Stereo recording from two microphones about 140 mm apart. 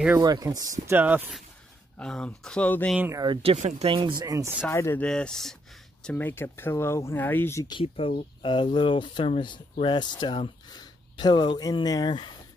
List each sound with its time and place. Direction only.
0.2 s speech: 25° right (ahead or behind)
0.9 s speech: 10° right (ahead or behind)
2.0 s speech: 5° left (ahead or behind)
3.0 s speech: 20° right (ahead or behind)
3.5 s speech: 55° right (ahead or behind)
4.2 s speech: 25° right (ahead or behind)
4.6 s speech: 15° left (ahead or behind)
5.0 s speech: 5° left (ahead or behind)
7.6 s speech: 35° left (ahead or behind)